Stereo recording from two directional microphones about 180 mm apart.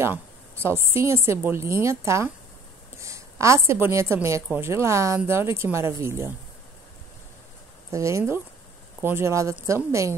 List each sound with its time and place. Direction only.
0.0 s a woman's voice: 15° right (ahead or behind)
7.9 s a woman's voice: 15° right (ahead or behind)